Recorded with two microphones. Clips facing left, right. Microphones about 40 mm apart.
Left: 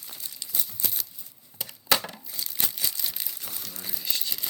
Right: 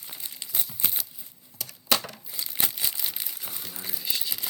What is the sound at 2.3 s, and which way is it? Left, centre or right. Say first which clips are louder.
Crumpling: right 1 dB; centre.